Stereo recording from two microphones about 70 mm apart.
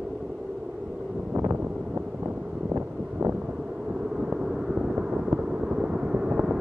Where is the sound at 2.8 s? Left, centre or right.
Centre.